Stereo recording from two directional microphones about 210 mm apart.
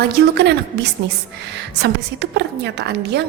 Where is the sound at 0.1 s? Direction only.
50° right (ahead or behind).